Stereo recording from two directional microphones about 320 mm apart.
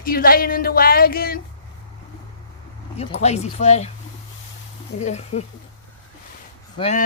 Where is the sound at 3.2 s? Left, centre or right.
Centre.